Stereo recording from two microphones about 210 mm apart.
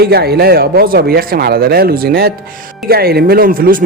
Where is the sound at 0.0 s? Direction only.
50° right (ahead or behind).